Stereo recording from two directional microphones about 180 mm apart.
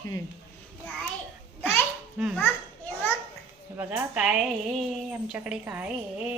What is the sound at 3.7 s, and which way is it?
A woman's voice, 5° right (ahead or behind).